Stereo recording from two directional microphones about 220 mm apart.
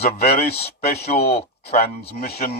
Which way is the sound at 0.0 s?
30° left (ahead or behind).